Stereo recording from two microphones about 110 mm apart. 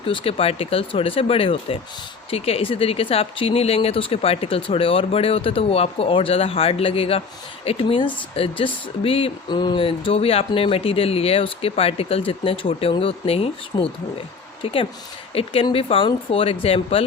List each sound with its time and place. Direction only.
0.0 s speech: 50° left (ahead or behind)
9.5 s speech: 45° left (ahead or behind); by 13.5 s 60° left (ahead or behind)
13.7 s speech: 45° left (ahead or behind)
14.6 s a woman's voice: 55° left (ahead or behind)